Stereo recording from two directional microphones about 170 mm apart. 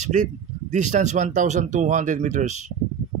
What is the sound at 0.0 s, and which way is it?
Speech, 45° right (ahead or behind).